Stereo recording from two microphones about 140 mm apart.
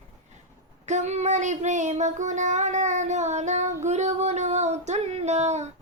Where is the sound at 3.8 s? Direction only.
55° right (ahead or behind).